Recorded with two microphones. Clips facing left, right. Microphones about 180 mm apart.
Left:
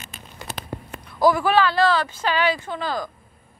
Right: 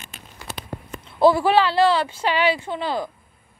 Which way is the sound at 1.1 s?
25° right (ahead or behind).